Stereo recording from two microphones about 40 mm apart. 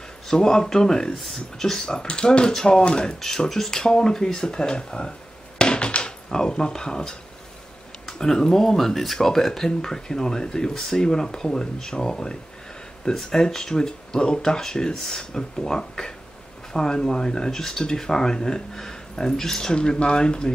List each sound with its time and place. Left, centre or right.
0.3 s speech: centre
3.2 s speech: centre
5.6 s a sound: left
6.3 s speech: centre